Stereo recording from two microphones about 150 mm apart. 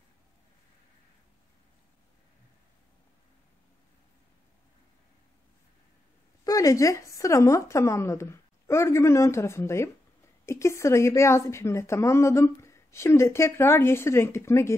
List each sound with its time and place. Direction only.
6.4 s a woman's voice: 20° left (ahead or behind)